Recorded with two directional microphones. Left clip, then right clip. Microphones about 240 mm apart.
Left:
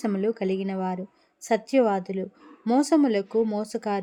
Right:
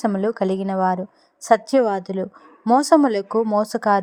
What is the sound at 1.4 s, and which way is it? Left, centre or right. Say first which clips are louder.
A woman's voice: right 6 dB; centre.